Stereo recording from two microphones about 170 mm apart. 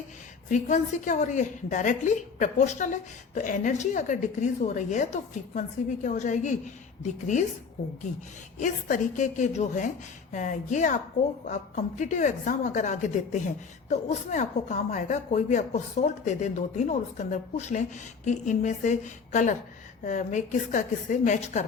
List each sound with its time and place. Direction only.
0.5 s speech: 45° left (ahead or behind)
8.1 s speech: 40° left (ahead or behind)